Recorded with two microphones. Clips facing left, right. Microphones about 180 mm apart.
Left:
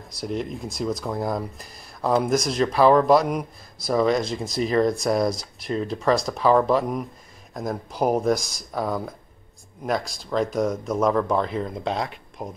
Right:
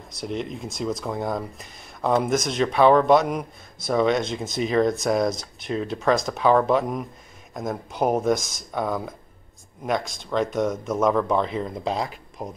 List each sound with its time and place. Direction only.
0.2 s speech: centre (ahead or behind)
8.4 s speech: 35° left (ahead or behind)
8.7 s speech: centre (ahead or behind)
10.3 s speech: centre (ahead or behind)